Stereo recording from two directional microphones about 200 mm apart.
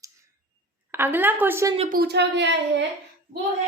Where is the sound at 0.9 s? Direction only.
10° right (ahead or behind).